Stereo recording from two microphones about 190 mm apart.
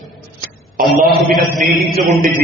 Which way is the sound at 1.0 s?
Centre (ahead or behind).